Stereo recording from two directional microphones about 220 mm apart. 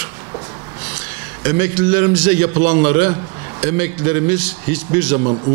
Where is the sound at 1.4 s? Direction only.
15° right (ahead or behind).